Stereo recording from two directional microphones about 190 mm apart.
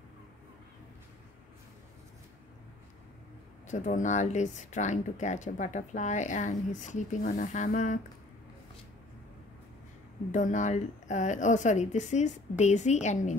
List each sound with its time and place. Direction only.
3.6 s speech: 40° left (ahead or behind)
10.3 s speech: 40° left (ahead or behind)